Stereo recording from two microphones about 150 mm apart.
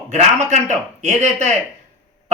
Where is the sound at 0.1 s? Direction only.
50° right (ahead or behind).